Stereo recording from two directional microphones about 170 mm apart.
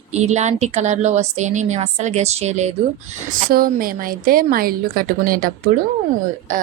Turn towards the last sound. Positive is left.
turn(degrees=-50)  # may be behind; listen again after turning